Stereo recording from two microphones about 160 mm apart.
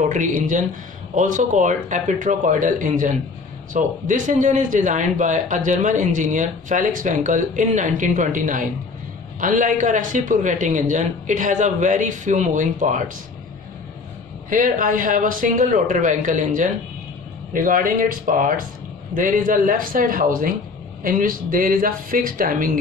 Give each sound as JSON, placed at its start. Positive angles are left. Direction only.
{"t": 0.1, "sound": "a man's voice", "side_deg": -50}
{"t": 14.5, "sound": "speech", "side_deg": -55}